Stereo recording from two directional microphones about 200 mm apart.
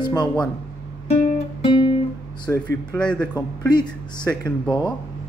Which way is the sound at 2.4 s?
10° left (ahead or behind).